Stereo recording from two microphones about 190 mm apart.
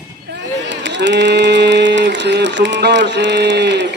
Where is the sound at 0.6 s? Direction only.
70° right (ahead or behind).